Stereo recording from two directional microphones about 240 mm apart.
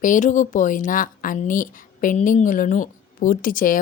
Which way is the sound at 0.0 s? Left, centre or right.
Left.